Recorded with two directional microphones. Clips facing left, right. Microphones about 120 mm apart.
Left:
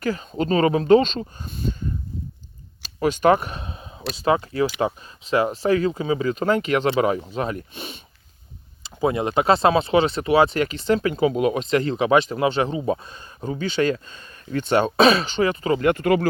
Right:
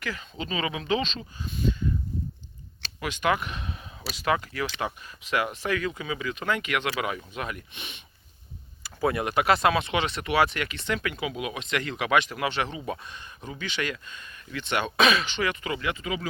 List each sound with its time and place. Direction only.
0.0 s speech: 40° left (ahead or behind)
3.0 s speech: 40° left (ahead or behind)
8.8 s speech: 20° left (ahead or behind); by 16.0 s 45° left (ahead or behind)
16.0 s speech: 65° left (ahead or behind)